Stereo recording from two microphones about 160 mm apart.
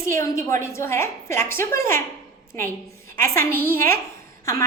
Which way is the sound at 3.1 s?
15° left (ahead or behind).